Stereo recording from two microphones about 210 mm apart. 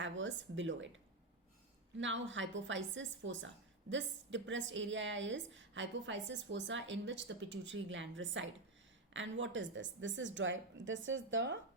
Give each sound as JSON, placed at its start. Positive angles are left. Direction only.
{"t": 0.0, "sound": "a woman's voice", "side_deg": -60}
{"t": 2.0, "sound": "a woman's voice", "side_deg": -60}